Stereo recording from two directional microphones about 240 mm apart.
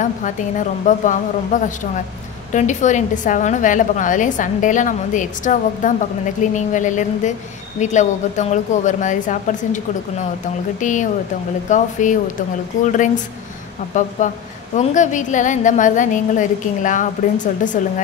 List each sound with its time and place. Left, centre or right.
0.8 s a woman's voice: left
10.8 s a woman's voice: left